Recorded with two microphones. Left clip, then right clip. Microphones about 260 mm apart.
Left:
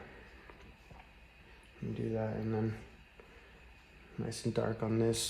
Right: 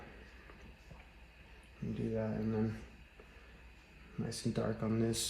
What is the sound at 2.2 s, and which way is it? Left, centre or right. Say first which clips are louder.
Speech: left 1 dB; left.